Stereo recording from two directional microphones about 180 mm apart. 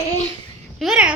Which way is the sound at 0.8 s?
5° right (ahead or behind).